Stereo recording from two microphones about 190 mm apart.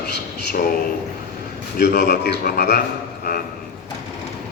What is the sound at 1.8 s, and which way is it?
A man's voice, 60° left (ahead or behind).